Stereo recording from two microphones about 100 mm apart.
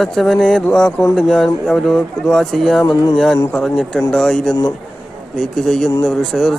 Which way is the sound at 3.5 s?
5° left (ahead or behind).